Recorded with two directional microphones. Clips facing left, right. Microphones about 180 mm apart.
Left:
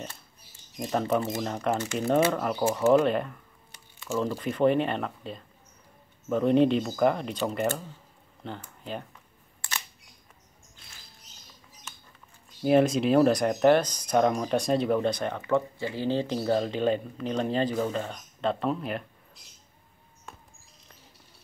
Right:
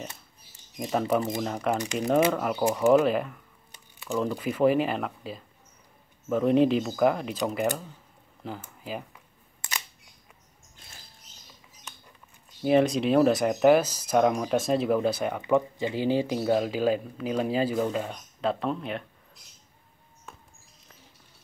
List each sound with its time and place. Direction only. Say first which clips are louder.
0.7 s speech: right 1 dB; centre (ahead or behind)
2.6 s speech: right 1 dB; 15° right (ahead or behind)
2.9 s speech: right 1 dB; centre (ahead or behind)
9.6 s camera: even; 15° right (ahead or behind)
12.6 s speech: even; centre (ahead or behind)
20.3 s mouse: left 1 dB; centre (ahead or behind)